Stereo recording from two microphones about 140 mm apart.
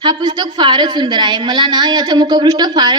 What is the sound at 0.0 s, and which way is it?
A woman's voice, 30° right (ahead or behind).